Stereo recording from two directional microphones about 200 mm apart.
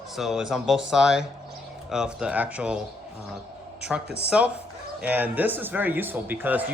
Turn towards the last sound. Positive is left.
turn(degrees=-10)  # may be behind; listen again after turning